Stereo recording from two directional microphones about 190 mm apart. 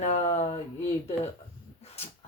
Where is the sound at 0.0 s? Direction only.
35° left (ahead or behind).